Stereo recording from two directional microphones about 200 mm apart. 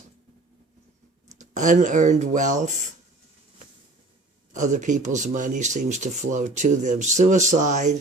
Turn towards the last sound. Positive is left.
turn(degrees=-35)  # may be behind; listen again after turning